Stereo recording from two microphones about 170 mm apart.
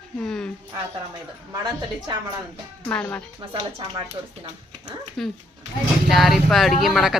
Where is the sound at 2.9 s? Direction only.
10° left (ahead or behind).